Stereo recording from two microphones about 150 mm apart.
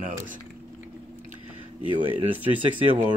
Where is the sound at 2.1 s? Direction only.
35° right (ahead or behind).